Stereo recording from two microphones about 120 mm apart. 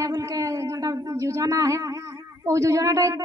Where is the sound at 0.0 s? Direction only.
30° right (ahead or behind).